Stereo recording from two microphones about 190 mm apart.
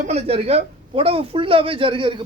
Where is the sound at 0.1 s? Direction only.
30° right (ahead or behind).